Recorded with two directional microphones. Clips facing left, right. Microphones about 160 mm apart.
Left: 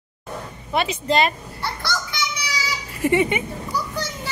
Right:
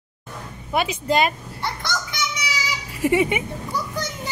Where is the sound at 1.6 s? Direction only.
20° right (ahead or behind).